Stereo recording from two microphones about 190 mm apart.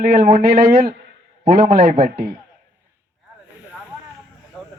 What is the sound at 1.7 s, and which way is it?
Speech, 35° right (ahead or behind).